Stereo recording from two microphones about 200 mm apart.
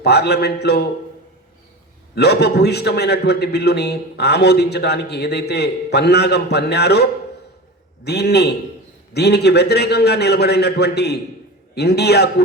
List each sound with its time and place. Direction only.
0.0 s a man's voice: 55° left (ahead or behind)
2.1 s a man's voice: 55° left (ahead or behind)